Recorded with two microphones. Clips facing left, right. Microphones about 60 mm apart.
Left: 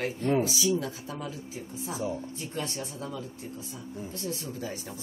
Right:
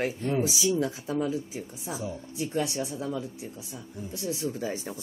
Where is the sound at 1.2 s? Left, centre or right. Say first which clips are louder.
Right 7 dB; centre.